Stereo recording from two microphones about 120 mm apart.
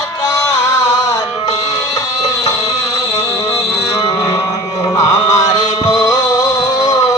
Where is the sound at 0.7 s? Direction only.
30° left (ahead or behind).